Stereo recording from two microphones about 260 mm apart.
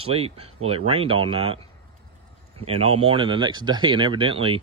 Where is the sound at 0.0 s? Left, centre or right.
Right.